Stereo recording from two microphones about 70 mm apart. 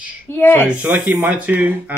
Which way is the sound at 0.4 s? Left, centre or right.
Left.